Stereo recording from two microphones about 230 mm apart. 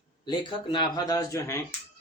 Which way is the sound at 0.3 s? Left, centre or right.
Centre.